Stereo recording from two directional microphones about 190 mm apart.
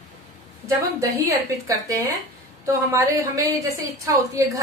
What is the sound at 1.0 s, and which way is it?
A woman's voice, 15° right (ahead or behind).